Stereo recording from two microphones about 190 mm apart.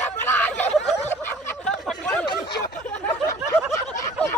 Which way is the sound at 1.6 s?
5° left (ahead or behind).